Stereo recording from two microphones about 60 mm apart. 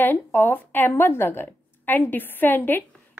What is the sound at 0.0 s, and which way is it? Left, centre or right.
A woman's voice, left.